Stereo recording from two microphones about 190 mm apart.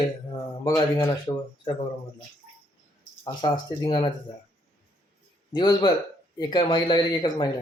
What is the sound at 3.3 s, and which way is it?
Speech, 20° left (ahead or behind).